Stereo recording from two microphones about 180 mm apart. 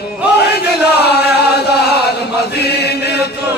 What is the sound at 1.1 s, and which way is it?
Chant, 65° left (ahead or behind).